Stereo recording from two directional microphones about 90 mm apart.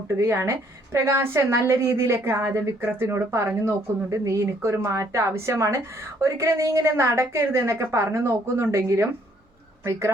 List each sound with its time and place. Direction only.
0.1 s a woman's voice: 30° right (ahead or behind)